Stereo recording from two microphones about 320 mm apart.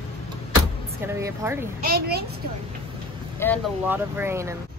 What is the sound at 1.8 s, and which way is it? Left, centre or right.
Speech, right.